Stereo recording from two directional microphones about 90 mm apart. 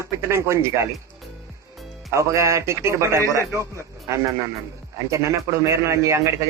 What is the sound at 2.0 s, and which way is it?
Speech, 35° right (ahead or behind).